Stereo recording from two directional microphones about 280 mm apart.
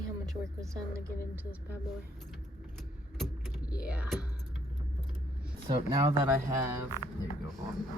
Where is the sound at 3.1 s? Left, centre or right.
Centre.